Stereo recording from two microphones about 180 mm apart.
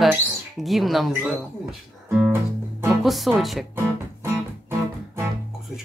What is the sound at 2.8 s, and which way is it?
Speech, centre (ahead or behind).